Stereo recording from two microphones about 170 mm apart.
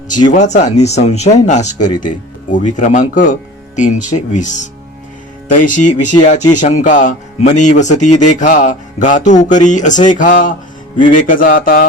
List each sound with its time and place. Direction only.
0.3 s speech: 45° left (ahead or behind)